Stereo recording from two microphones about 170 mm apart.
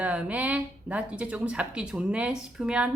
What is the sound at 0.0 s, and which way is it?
A woman's voice, 10° right (ahead or behind).